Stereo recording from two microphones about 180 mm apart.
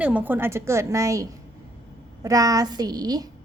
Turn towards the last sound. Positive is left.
turn(degrees=-20)  # may be behind; listen again after turning